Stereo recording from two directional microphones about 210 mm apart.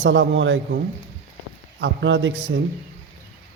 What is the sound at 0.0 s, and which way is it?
Speech, 60° right (ahead or behind).